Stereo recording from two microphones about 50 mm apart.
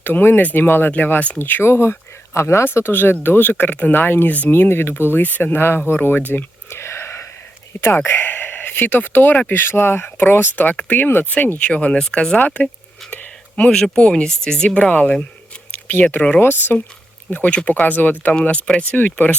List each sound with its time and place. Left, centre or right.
0.0 s speech: left
2.9 s speech: left
4.0 s speech: left
4.3 s speech: left
4.7 s speech: left
5.2 s speech: left
6.7 s a sound: left
7.8 s speech: left
10.5 s speech: left; by 12.4 s centre
12.4 s speech: left
13.6 s speech: centre
14.8 s speech: left
16.4 s speech: left
17.3 s speech: left